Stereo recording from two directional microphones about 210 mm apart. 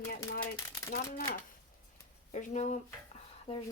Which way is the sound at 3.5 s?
25° left (ahead or behind).